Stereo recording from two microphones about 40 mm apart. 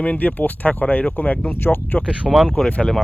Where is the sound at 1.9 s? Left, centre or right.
Left.